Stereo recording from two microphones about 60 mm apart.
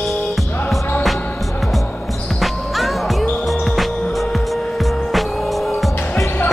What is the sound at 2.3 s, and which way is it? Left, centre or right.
Music, centre.